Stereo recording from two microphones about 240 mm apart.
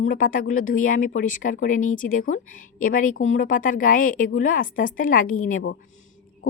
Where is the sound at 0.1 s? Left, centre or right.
Left.